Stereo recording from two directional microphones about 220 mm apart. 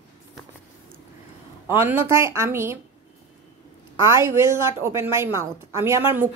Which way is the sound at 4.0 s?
10° right (ahead or behind).